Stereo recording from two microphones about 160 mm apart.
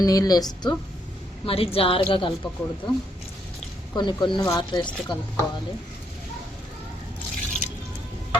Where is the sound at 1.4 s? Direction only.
35° left (ahead or behind).